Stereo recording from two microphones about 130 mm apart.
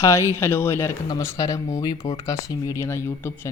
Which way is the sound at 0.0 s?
20° left (ahead or behind).